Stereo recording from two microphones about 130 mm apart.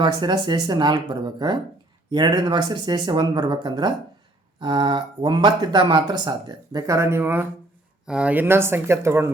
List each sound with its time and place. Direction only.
0.0 s speech: 35° right (ahead or behind)